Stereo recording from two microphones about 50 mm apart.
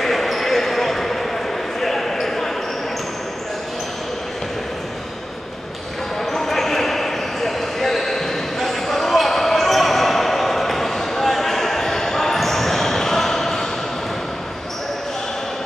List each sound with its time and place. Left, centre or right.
0.0 s basketball bounce: centre
6.3 s basketball bounce: centre